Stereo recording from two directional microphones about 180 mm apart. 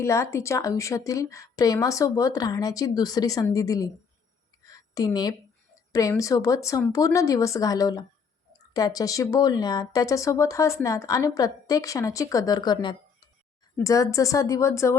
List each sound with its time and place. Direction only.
0.0 s speech: 15° left (ahead or behind)
4.7 s a sound: 20° left (ahead or behind)
5.9 s speech: 20° left (ahead or behind)